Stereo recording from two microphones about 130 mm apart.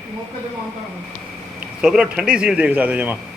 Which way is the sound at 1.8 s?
5° right (ahead or behind).